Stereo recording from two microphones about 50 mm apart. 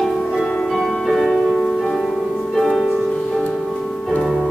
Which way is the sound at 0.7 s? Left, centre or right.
Centre.